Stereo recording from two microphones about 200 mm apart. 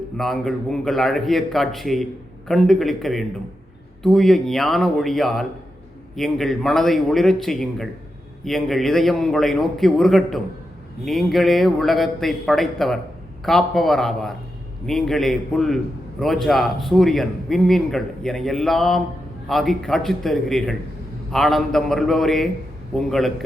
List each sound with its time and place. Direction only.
0.2 s a man's voice: centre (ahead or behind)